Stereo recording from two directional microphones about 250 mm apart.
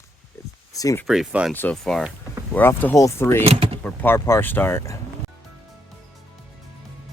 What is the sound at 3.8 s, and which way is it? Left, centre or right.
Speech, centre.